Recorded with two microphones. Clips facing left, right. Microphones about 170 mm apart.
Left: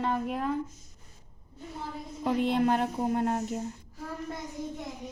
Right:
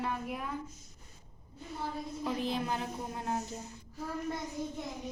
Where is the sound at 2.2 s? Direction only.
65° left (ahead or behind).